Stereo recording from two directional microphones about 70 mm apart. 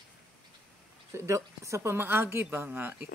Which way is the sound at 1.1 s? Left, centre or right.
Right.